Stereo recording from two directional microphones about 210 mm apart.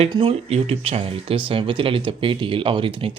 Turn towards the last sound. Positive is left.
turn(degrees=-25)  # may be behind; listen again after turning